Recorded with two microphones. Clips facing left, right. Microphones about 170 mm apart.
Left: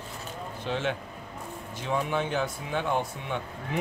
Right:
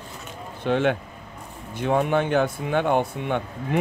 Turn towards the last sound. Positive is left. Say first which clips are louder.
# right 7 dB
turn(degrees=-60)  # may be behind; listen again after turning